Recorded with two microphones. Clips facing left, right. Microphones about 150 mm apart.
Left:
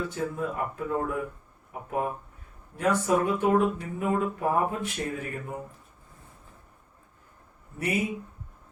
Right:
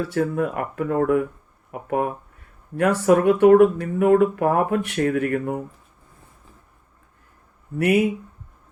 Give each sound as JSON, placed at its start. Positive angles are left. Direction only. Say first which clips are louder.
{"t": 0.1, "sound": "speech", "louder": "right 8 dB", "side_deg": -70}
{"t": 7.8, "sound": "speech", "louder": "right 10 dB", "side_deg": -70}